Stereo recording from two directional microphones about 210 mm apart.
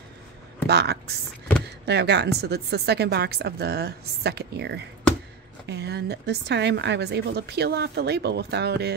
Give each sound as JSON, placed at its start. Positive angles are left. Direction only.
{"t": 0.7, "sound": "a woman's voice", "side_deg": -50}